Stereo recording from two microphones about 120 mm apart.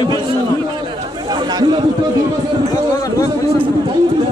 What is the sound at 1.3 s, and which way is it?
Speech, 40° right (ahead or behind).